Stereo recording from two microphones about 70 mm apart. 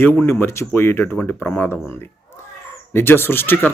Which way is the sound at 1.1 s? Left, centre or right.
Left.